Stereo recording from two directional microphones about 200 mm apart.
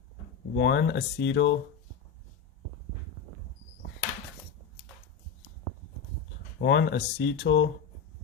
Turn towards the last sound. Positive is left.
turn(degrees=60)  # may be behind; listen again after turning